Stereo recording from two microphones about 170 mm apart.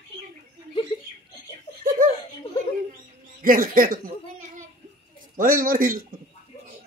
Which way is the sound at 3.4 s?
55° right (ahead or behind).